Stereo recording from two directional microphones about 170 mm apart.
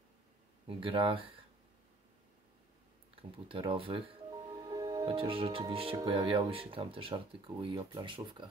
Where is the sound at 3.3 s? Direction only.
30° right (ahead or behind).